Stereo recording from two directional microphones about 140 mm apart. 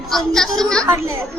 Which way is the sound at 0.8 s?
20° right (ahead or behind).